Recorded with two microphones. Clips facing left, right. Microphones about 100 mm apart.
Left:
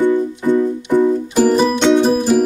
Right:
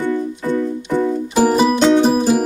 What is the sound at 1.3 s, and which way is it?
Music, 10° right (ahead or behind).